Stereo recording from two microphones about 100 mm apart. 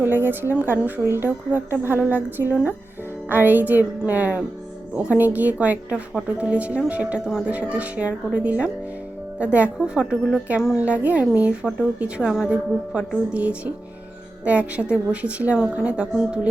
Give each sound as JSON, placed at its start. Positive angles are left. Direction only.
{"t": 0.0, "sound": "a woman's voice", "side_deg": -20}